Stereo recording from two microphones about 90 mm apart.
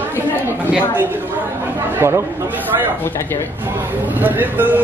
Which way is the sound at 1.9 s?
25° right (ahead or behind).